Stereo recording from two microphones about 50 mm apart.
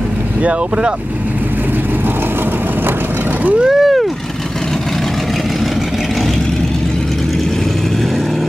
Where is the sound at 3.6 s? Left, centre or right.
Centre.